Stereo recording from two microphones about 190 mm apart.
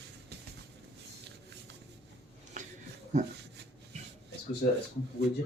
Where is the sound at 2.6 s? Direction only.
40° right (ahead or behind).